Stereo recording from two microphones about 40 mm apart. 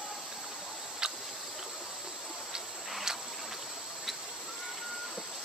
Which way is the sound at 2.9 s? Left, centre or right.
Centre.